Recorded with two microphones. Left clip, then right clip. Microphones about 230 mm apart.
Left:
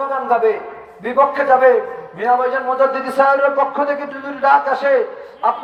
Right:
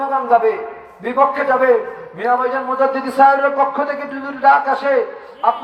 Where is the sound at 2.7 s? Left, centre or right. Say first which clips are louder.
Left 1 dB; left.